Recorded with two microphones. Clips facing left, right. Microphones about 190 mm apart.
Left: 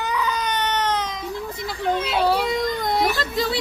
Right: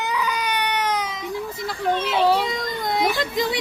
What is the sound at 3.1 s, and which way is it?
Children playing, 20° right (ahead or behind).